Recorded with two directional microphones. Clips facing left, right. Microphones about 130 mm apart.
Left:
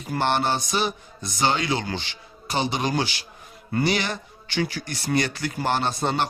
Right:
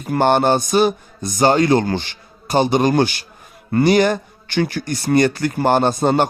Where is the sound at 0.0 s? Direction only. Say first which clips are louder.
Right 8 dB; 50° right (ahead or behind).